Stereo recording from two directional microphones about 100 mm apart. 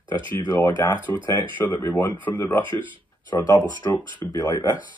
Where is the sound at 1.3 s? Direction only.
20° left (ahead or behind).